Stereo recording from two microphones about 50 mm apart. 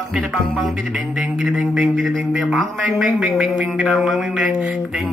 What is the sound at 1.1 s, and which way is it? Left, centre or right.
Speech, centre.